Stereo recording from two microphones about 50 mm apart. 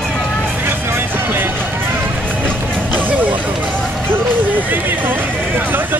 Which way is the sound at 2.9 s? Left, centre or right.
Right.